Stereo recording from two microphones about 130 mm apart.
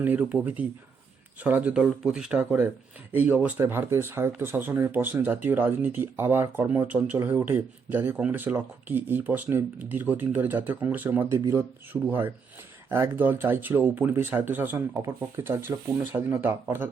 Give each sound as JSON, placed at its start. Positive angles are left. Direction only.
{"t": 0.0, "sound": "speech", "side_deg": -10}
{"t": 11.9, "sound": "speech", "side_deg": 0}
{"t": 12.9, "sound": "speech", "side_deg": -15}